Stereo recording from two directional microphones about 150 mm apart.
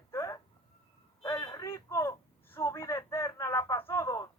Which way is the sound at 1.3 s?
20° left (ahead or behind).